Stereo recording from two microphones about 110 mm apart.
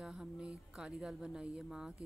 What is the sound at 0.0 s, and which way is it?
A woman's voice, 5° right (ahead or behind).